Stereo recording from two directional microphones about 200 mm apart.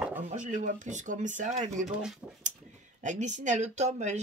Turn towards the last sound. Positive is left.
turn(degrees=-35)  # may be behind; listen again after turning